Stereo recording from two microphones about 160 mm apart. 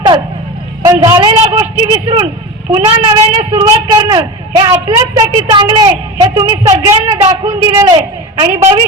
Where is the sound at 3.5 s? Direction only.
20° right (ahead or behind).